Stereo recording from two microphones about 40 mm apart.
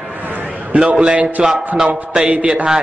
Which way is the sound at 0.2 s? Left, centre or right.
Right.